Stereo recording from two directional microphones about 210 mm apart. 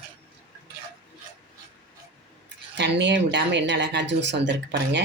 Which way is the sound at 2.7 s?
55° right (ahead or behind).